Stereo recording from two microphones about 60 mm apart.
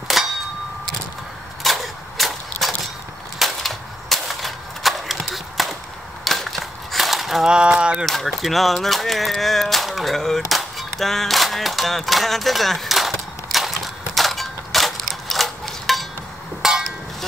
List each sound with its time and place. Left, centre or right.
0.1 s clang: centre
1.6 s a sound: centre
6.2 s crushing: centre
7.4 s speech: centre
8.0 s speech: centre
13.1 s a sound: centre